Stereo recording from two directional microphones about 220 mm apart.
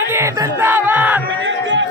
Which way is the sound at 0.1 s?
10° right (ahead or behind).